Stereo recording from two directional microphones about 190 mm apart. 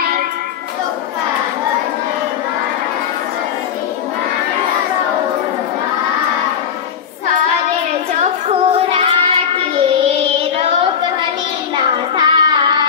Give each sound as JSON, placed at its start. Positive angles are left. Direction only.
{"t": 8.2, "sound": "child singing", "side_deg": -30}
{"t": 11.7, "sound": "child singing", "side_deg": -25}